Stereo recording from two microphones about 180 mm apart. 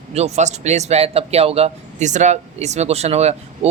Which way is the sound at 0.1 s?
35° right (ahead or behind).